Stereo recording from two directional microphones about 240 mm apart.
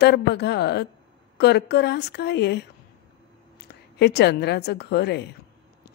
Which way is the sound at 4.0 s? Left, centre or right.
Left.